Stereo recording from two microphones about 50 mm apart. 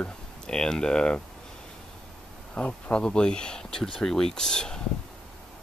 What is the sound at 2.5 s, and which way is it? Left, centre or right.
Speech, left.